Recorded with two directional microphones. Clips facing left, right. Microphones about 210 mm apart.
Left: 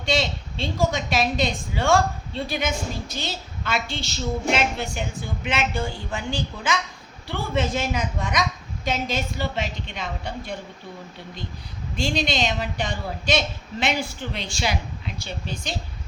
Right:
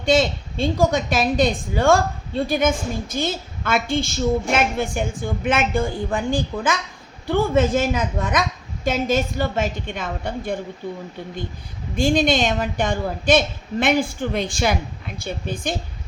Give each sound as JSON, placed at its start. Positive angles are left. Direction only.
{"t": 0.0, "sound": "a woman's voice", "side_deg": -50}
{"t": 11.9, "sound": "a woman's voice", "side_deg": -50}